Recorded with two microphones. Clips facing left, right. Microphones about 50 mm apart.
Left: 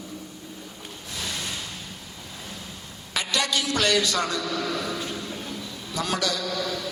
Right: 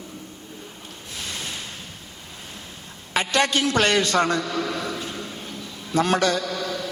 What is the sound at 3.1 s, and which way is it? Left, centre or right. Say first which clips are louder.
A man's voice: right 5 dB; right.